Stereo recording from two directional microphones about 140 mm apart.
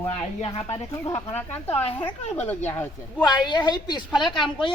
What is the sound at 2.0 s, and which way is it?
Speech, 10° left (ahead or behind).